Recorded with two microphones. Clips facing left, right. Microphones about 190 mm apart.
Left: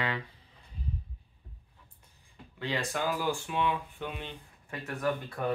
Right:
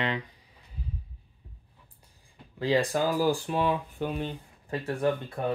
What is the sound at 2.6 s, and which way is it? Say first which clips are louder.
Speech: right 7 dB; 35° right (ahead or behind).